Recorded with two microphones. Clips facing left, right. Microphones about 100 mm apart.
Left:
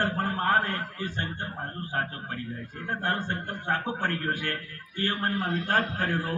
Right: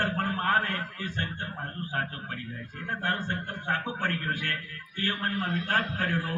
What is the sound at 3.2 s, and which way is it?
A man's voice, 40° left (ahead or behind).